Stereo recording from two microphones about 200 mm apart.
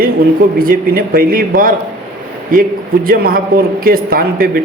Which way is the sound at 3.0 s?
50° right (ahead or behind).